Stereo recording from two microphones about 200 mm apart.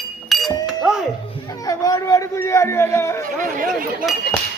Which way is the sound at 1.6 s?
15° left (ahead or behind).